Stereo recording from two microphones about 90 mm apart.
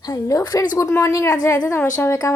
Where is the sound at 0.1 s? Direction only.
35° left (ahead or behind).